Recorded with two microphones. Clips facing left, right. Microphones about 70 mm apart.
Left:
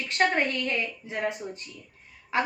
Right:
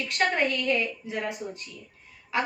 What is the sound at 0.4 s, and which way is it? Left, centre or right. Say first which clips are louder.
A woman's voice: right 3 dB; left.